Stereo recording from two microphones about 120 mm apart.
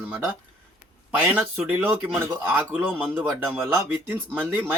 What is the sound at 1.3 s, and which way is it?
Speech, 10° right (ahead or behind).